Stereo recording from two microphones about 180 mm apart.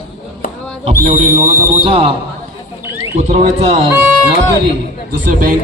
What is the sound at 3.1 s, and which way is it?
Speech, 40° right (ahead or behind).